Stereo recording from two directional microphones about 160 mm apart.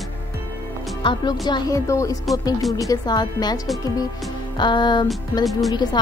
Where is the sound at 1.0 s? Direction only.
25° left (ahead or behind).